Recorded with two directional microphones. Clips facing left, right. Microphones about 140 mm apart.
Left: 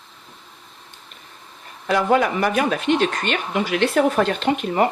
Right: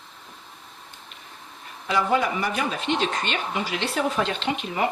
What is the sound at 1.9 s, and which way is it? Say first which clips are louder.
Speech: left 5 dB; 60° left (ahead or behind).